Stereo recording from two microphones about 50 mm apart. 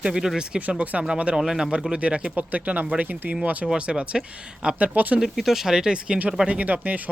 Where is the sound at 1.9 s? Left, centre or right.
Right.